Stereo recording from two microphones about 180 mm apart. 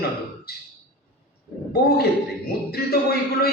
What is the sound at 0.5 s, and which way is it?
Speech, 60° left (ahead or behind).